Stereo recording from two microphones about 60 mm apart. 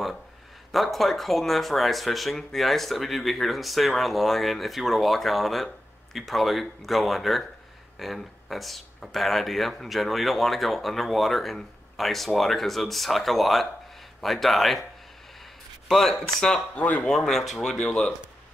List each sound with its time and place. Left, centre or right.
0.7 s speech: centre
15.9 s speech: centre
16.7 s speech: left
17.1 s speech: centre
17.7 s speech: centre